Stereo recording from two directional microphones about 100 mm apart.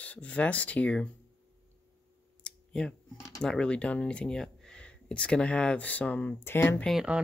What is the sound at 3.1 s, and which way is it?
Speech, 35° left (ahead or behind).